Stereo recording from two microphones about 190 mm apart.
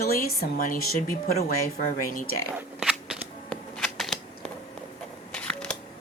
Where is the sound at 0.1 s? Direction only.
50° left (ahead or behind).